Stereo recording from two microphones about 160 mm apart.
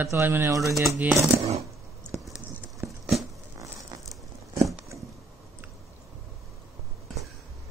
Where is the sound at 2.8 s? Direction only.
10° right (ahead or behind).